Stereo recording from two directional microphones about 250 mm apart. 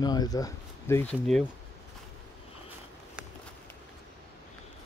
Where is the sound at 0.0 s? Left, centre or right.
Centre.